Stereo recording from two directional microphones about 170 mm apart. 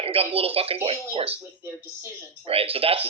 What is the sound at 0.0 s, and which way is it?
Speech, 35° right (ahead or behind).